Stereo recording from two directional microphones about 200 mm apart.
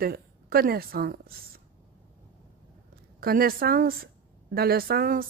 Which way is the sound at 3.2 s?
45° right (ahead or behind).